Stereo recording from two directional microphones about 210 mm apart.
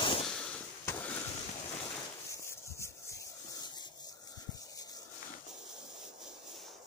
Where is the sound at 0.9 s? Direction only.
10° left (ahead or behind).